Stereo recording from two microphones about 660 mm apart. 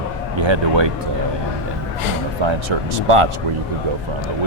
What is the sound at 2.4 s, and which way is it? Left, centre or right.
Speech, right.